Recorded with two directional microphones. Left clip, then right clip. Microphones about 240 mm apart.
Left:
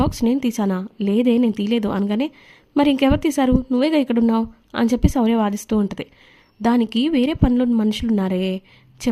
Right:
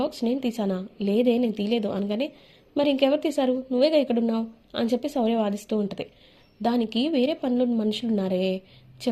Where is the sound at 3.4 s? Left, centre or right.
Left.